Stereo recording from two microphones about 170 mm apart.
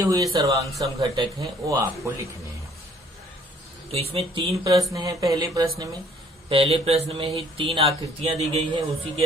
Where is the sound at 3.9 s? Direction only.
35° right (ahead or behind).